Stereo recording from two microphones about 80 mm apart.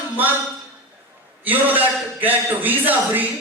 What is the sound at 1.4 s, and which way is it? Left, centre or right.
A man's voice, right.